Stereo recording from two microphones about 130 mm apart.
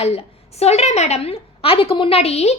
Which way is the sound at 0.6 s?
55° left (ahead or behind).